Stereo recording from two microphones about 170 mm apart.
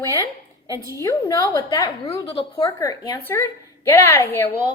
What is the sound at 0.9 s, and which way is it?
Speech, 20° left (ahead or behind).